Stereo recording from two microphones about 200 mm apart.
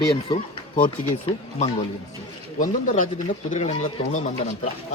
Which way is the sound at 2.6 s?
40° left (ahead or behind).